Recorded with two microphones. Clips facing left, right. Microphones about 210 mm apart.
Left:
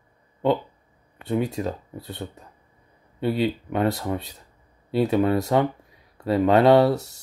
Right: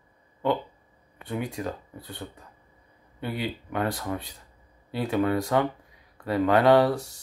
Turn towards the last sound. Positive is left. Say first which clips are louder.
# left 3 dB
turn(degrees=25)  # may be behind; listen again after turning